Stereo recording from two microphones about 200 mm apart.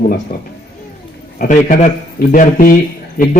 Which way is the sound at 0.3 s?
45° left (ahead or behind).